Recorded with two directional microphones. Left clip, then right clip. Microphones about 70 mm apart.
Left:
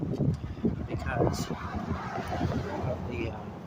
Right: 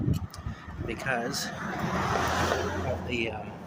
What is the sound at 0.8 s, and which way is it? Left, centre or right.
Speech, centre.